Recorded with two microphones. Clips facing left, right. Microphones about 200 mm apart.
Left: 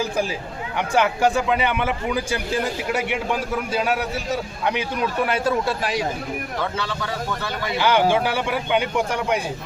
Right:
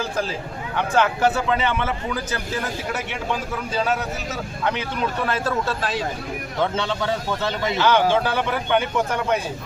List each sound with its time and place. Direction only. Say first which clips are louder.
0.8 s speech: even; 15° left (ahead or behind)
6.6 s speech: right 7 dB; 25° right (ahead or behind)
7.8 s speech: left 1 dB; 10° left (ahead or behind)